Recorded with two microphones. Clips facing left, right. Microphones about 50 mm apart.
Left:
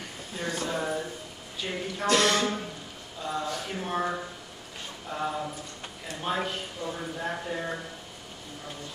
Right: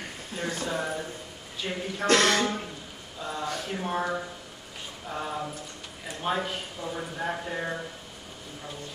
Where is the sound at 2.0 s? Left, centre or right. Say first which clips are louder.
Right 1 dB; right.